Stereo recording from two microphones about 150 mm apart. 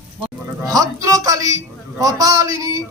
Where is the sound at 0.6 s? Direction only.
25° right (ahead or behind).